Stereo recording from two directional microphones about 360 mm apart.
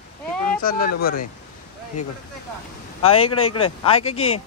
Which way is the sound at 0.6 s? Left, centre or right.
Left.